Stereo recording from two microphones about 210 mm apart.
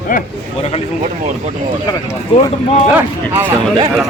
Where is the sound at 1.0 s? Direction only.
35° right (ahead or behind).